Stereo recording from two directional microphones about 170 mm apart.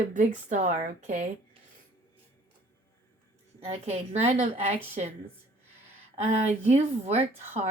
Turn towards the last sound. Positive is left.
turn(degrees=-40)  # may be behind; listen again after turning